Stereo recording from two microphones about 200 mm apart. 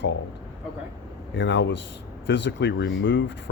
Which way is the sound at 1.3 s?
65° left (ahead or behind).